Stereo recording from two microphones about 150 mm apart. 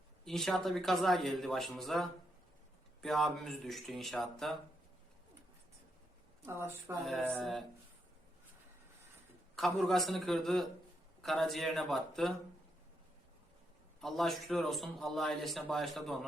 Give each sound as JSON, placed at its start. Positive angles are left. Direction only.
{"t": 0.3, "sound": "a man's voice", "side_deg": 0}
{"t": 6.4, "sound": "a woman's voice", "side_deg": -15}
{"t": 9.6, "sound": "a man's voice", "side_deg": 0}
{"t": 14.0, "sound": "a man's voice", "side_deg": 0}